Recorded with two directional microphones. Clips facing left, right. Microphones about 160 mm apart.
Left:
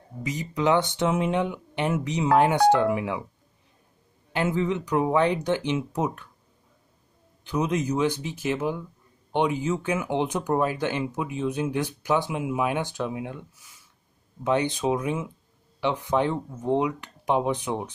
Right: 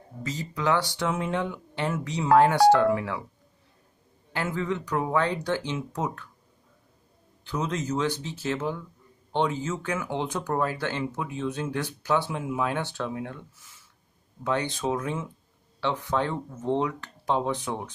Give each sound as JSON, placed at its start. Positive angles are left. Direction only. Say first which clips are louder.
{"t": 0.2, "sound": "speech", "louder": "left 4 dB", "side_deg": 15}
{"t": 4.3, "sound": "speech", "louder": "left 4 dB", "side_deg": 20}
{"t": 7.4, "sound": "speech", "louder": "left 4 dB", "side_deg": 15}